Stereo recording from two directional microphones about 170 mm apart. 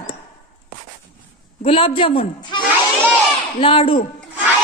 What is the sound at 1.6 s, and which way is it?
A man's voice, 35° left (ahead or behind).